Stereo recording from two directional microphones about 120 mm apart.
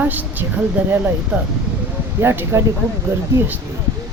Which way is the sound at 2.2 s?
20° right (ahead or behind).